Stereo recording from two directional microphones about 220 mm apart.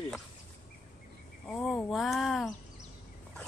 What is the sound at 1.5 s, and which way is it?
A woman's voice, centre (ahead or behind).